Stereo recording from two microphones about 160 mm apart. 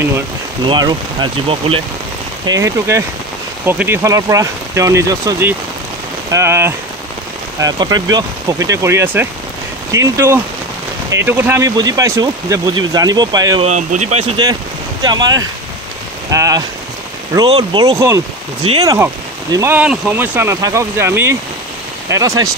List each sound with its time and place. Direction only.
0.7 s speech: 25° right (ahead or behind)
2.4 s speech: 20° right (ahead or behind)
13.6 s speech: 45° right (ahead or behind)
14.4 s speech: 25° right (ahead or behind)
17.7 s speech: 20° right (ahead or behind)
19.5 s speech: 15° right (ahead or behind)